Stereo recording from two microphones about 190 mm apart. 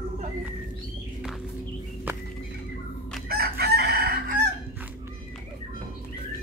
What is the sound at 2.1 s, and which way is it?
Horse, 10° right (ahead or behind).